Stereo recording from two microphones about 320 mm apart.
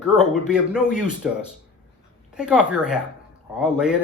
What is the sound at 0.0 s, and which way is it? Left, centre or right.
Speech, centre.